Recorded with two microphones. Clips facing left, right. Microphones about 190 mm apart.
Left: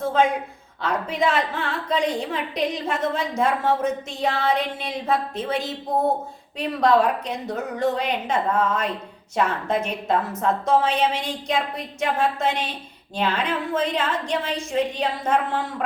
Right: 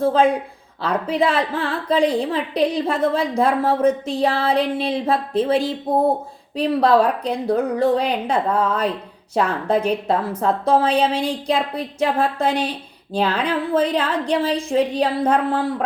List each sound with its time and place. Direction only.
0.0 s a woman's voice: 35° right (ahead or behind)